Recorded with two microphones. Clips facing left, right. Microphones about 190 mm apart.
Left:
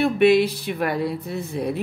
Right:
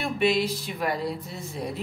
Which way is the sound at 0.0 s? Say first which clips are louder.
Left 8 dB; 60° left (ahead or behind).